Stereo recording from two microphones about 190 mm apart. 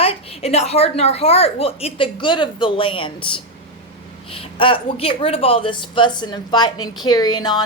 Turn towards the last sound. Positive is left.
turn(degrees=20)  # may be behind; listen again after turning